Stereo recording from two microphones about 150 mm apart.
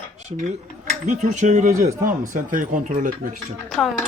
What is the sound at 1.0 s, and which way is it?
Speech, 50° right (ahead or behind).